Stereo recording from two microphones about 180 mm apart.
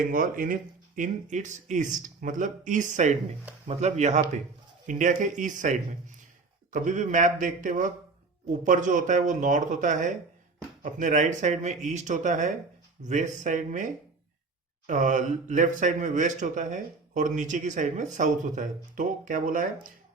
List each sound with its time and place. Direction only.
0.0 s speech: 50° right (ahead or behind)
14.8 s speech: 45° right (ahead or behind)